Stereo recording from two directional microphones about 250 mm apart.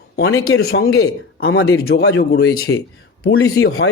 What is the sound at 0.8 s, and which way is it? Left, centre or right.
Speech, left.